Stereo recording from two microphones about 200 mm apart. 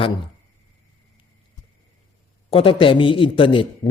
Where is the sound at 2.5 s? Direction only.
25° left (ahead or behind).